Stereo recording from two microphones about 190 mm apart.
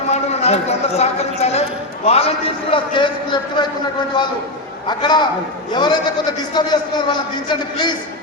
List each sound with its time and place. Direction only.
0.1 s a man's voice: 35° left (ahead or behind)
4.9 s a man's voice: 25° left (ahead or behind)